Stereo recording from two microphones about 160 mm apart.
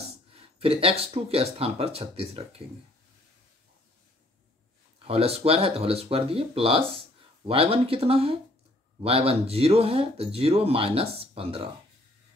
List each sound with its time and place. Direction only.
0.3 s speech: 35° right (ahead or behind)
4.9 s speech: 35° right (ahead or behind)